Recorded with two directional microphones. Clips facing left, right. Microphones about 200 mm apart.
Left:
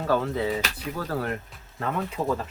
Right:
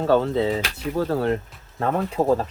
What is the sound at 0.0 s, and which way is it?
Speech, 25° right (ahead or behind).